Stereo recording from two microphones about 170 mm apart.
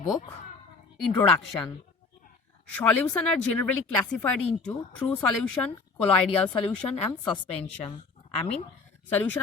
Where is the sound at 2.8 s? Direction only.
10° left (ahead or behind).